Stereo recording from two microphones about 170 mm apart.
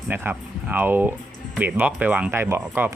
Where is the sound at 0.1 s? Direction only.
10° right (ahead or behind).